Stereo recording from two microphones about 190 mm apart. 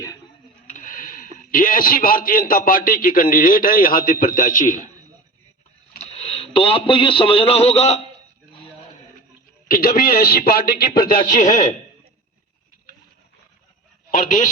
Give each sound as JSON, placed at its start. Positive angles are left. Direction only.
{"t": 0.7, "sound": "a sound", "side_deg": 45}
{"t": 1.5, "sound": "a man's voice", "side_deg": 45}
{"t": 6.0, "sound": "a man's voice", "side_deg": 35}
{"t": 9.6, "sound": "a man's voice", "side_deg": 50}
{"t": 14.1, "sound": "a man's voice", "side_deg": 45}